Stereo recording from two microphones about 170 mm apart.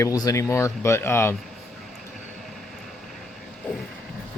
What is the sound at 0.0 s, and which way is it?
Speech, 20° left (ahead or behind).